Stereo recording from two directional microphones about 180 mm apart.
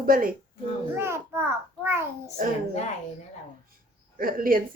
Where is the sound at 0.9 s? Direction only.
15° right (ahead or behind).